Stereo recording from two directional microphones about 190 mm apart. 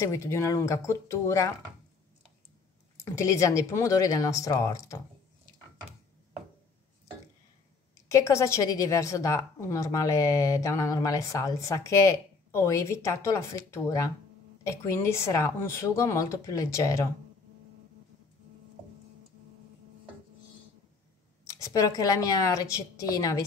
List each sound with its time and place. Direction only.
0.0 s a woman's voice: 15° left (ahead or behind)
3.2 s a woman's voice: 15° left (ahead or behind)
8.1 s a woman's voice: 15° left (ahead or behind)
21.5 s a woman's voice: 15° left (ahead or behind)